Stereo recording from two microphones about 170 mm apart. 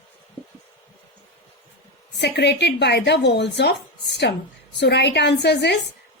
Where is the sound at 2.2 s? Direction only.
80° left.